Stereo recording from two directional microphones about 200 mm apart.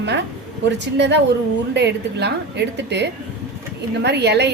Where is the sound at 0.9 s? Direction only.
60° right (ahead or behind).